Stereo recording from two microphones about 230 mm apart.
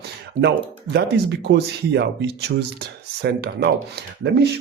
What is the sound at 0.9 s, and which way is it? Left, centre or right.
Speech, right.